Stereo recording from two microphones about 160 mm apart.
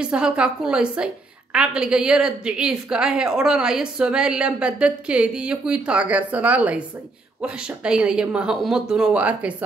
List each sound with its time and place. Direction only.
0.0 s a woman's voice: 5° right (ahead or behind)